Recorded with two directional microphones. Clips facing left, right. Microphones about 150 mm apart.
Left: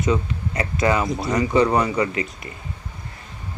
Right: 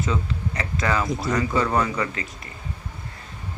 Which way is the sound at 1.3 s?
20° left (ahead or behind).